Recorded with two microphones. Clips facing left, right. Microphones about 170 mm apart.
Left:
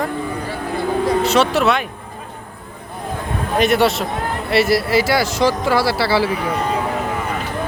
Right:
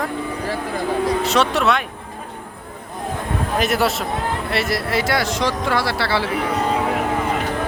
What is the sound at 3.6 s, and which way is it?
Speech, centre (ahead or behind).